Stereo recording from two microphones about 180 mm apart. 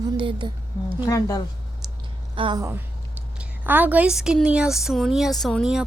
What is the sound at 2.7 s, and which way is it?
A woman's voice, 10° right (ahead or behind).